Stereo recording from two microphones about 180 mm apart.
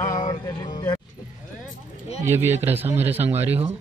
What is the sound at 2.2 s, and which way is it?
Speech, 15° right (ahead or behind).